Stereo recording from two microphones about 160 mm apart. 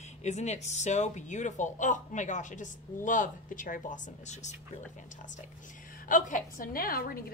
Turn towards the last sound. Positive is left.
turn(degrees=70)  # may be behind; listen again after turning